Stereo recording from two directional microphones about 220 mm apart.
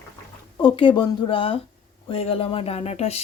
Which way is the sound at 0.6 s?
20° left (ahead or behind).